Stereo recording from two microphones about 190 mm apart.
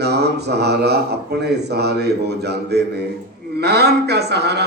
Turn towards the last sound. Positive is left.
turn(degrees=-60)  # may be behind; listen again after turning